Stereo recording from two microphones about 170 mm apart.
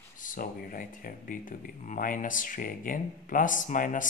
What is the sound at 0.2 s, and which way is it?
Speech, 55° left (ahead or behind).